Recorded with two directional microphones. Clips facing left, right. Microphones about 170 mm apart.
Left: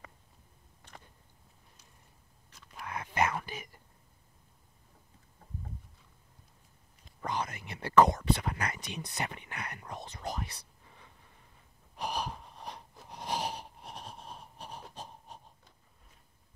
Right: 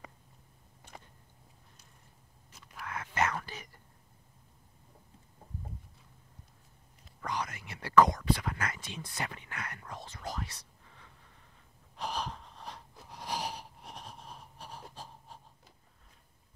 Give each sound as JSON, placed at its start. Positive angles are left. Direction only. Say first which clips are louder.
{"t": 2.7, "sound": "whispering", "louder": "left 1 dB", "side_deg": 15}
{"t": 7.2, "sound": "whispering", "louder": "left 2 dB", "side_deg": 25}
{"t": 12.0, "sound": "wheeze", "louder": "left 1 dB", "side_deg": 15}